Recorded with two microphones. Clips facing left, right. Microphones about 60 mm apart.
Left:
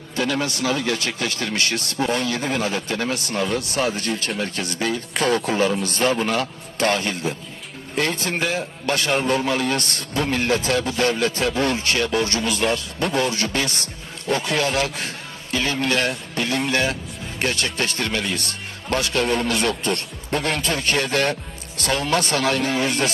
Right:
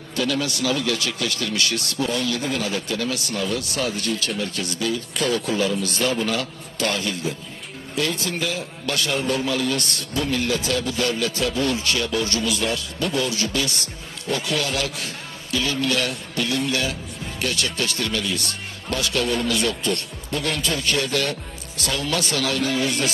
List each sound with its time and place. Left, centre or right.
0.2 s a man's voice: left
18.2 s a man's voice: left